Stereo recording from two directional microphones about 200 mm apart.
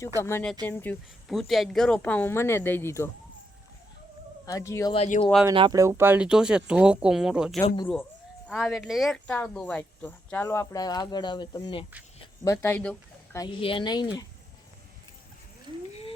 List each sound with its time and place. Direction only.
0.2 s speech: 10° left (ahead or behind)
1.3 s speech: centre (ahead or behind)
4.4 s speech: 15° left (ahead or behind)
4.9 s speech: 40° left (ahead or behind)
5.5 s speech: 20° right (ahead or behind); by 11.9 s 25° left (ahead or behind)
12.6 s speech: 10° left (ahead or behind)
13.4 s speech: 25° left (ahead or behind)
15.9 s a sound: 30° left (ahead or behind)